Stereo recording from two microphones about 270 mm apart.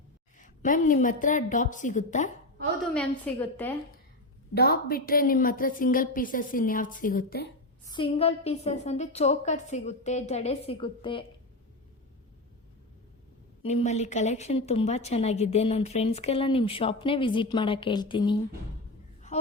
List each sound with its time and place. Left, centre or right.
0.3 s a woman's voice: left
2.9 s a woman's voice: centre
4.5 s a woman's voice: left
7.9 s a woman's voice: centre
13.6 s a woman's voice: left